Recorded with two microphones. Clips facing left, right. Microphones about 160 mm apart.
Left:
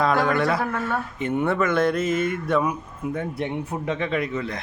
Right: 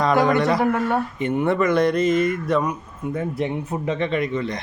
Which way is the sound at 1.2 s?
Centre (ahead or behind).